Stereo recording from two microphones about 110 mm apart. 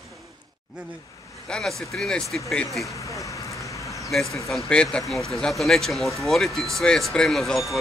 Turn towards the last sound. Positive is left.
turn(degrees=0)  # may be behind; listen again after turning